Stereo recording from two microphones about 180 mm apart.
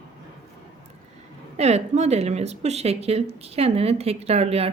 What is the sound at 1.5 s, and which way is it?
Speech, 35° right (ahead or behind).